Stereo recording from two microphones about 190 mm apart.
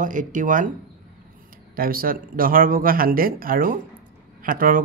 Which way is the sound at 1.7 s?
50° right (ahead or behind).